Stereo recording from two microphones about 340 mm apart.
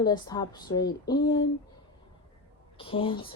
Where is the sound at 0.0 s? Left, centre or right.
Centre.